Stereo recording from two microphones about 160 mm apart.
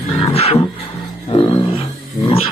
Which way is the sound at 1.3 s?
30° left (ahead or behind).